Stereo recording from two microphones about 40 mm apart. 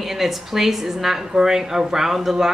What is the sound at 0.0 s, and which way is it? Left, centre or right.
A woman's voice, centre.